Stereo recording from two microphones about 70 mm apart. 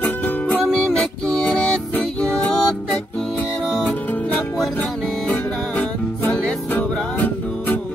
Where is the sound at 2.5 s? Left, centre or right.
Centre.